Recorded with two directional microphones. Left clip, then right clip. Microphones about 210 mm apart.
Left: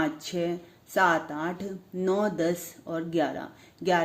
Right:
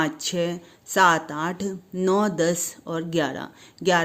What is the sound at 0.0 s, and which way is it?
Speech, 45° right (ahead or behind).